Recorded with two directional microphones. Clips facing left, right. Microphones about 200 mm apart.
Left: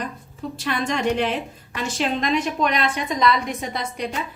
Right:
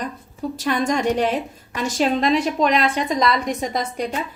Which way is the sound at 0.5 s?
40° right (ahead or behind).